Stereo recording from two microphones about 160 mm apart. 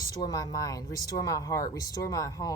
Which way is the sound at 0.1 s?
25° left (ahead or behind).